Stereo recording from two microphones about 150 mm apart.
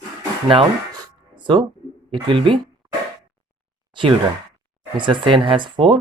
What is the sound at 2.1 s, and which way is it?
Speech, 35° right (ahead or behind).